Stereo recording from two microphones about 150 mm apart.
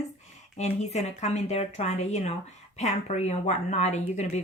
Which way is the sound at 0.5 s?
45° left (ahead or behind).